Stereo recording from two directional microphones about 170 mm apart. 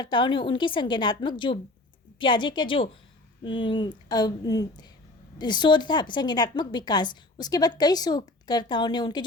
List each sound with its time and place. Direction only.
0.0 s a woman's voice: 25° left (ahead or behind)